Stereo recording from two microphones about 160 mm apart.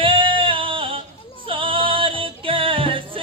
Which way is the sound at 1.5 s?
35° right (ahead or behind).